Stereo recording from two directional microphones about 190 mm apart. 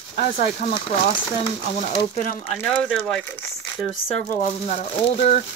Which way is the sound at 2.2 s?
40° left (ahead or behind).